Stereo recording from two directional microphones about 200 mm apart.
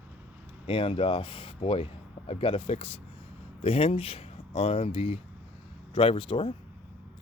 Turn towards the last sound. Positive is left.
turn(degrees=25)  # may be behind; listen again after turning